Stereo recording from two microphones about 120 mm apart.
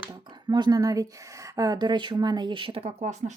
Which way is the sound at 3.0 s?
85° right.